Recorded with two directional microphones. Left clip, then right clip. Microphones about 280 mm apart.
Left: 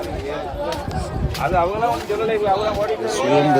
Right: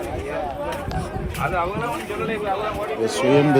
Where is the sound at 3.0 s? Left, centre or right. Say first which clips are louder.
Even; centre.